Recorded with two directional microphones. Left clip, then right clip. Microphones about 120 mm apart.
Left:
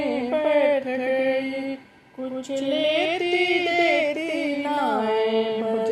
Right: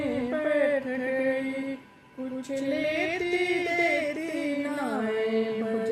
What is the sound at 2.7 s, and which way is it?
Music, 25° left (ahead or behind).